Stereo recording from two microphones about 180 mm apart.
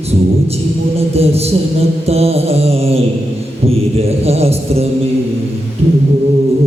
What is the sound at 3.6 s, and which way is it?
Music, 35° right (ahead or behind).